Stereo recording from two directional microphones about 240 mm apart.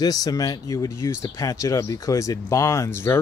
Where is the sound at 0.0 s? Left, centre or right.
Centre.